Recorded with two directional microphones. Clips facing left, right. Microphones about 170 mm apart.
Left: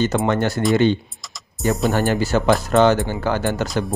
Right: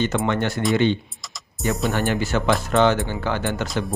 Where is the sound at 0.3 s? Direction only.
40° left (ahead or behind).